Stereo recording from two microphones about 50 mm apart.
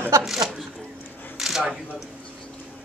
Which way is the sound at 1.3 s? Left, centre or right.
Centre.